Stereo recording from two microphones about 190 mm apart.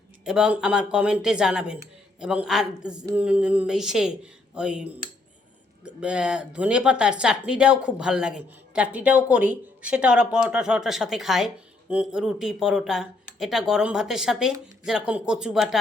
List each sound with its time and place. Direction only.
0.3 s speech: 5° right (ahead or behind)